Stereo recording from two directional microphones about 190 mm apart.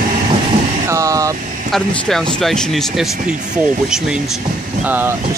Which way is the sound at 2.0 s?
5° left (ahead or behind).